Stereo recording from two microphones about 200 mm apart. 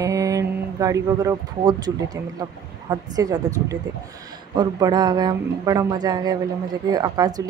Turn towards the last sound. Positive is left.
turn(degrees=-20)  # may be behind; listen again after turning